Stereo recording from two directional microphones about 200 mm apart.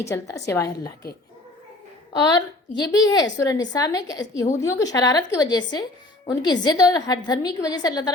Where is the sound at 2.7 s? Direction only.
20° left (ahead or behind).